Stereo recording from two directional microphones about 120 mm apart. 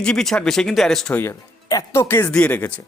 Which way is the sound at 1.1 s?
25° left (ahead or behind).